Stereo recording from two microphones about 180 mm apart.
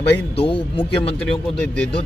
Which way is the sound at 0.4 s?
30° left (ahead or behind).